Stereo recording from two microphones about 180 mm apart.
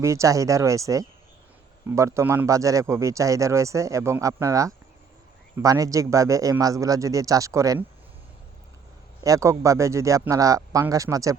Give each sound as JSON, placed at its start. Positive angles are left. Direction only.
{"t": 0.0, "sound": "speech", "side_deg": -15}
{"t": 9.2, "sound": "speech", "side_deg": -15}